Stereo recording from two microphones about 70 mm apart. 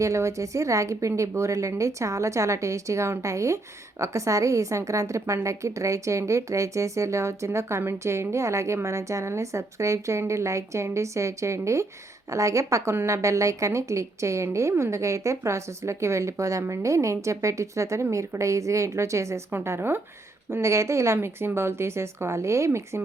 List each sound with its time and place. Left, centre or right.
0.0 s a woman's voice: right